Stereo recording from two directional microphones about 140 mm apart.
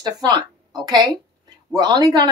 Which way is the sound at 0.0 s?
30° right (ahead or behind).